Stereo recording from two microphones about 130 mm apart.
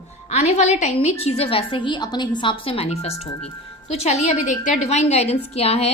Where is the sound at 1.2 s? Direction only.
50° left (ahead or behind).